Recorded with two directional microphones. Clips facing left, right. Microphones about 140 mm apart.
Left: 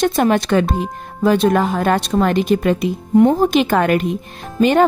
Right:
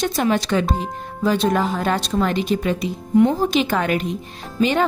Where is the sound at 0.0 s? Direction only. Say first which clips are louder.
Left 5 dB; 55° left (ahead or behind).